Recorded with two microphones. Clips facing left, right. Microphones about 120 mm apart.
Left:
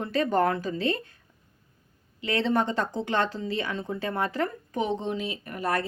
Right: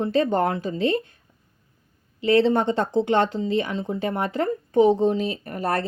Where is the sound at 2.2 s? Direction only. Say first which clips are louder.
Right 7 dB; 30° right (ahead or behind).